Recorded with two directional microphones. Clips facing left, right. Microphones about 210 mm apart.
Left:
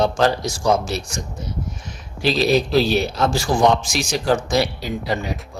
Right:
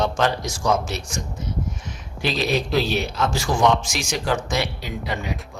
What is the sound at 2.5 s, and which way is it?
A man's voice, 35° left (ahead or behind).